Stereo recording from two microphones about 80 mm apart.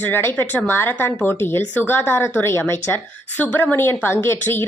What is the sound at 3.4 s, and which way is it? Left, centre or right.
A woman's voice, centre.